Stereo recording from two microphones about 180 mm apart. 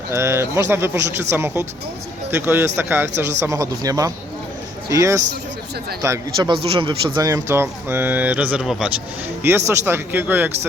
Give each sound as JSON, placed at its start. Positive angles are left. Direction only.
{"t": 0.1, "sound": "speech", "side_deg": -15}
{"t": 9.4, "sound": "speech", "side_deg": -15}